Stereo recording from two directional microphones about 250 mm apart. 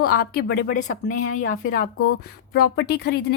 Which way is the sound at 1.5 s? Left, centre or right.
Left.